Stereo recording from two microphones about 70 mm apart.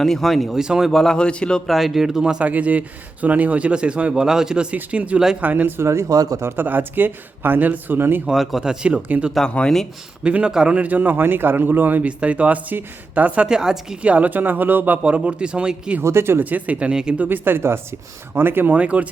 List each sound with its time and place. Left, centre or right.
0.0 s speech: centre
0.9 s speech: centre
1.6 s speech: centre
2.5 s a man's voice: right
5.8 s speech: right
6.4 s a man's voice: right
8.3 s speech: centre; by 9.3 s right
9.3 s speech: centre
10.2 s a man's voice: centre
16.0 s speech: right
16.4 s a man's voice: right
17.2 s a man's voice: right